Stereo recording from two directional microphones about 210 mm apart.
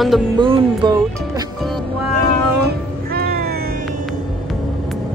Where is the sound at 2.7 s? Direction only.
45° right (ahead or behind).